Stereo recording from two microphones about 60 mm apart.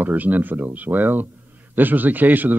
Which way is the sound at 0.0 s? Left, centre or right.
Right.